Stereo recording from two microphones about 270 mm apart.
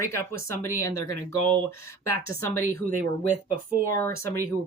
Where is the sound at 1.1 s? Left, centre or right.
Right.